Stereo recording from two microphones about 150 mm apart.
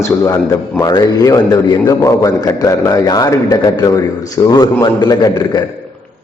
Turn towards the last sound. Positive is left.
turn(degrees=25)  # may be behind; listen again after turning